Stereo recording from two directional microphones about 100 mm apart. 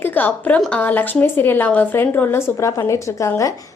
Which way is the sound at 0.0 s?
20° left (ahead or behind).